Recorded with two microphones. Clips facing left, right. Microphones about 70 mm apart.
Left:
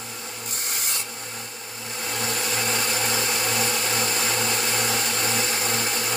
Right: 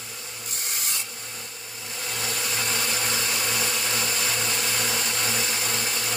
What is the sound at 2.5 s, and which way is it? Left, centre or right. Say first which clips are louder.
Blender: left 2 dB; left.